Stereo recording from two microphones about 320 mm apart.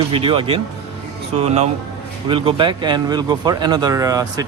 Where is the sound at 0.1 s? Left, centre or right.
Centre.